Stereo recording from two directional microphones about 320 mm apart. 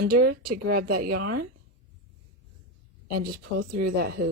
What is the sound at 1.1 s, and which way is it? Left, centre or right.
Speech, right.